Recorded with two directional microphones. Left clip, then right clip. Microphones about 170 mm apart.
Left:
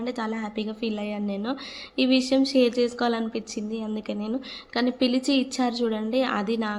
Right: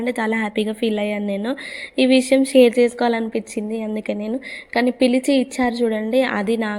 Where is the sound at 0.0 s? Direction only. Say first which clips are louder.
Right 9 dB; 30° right (ahead or behind).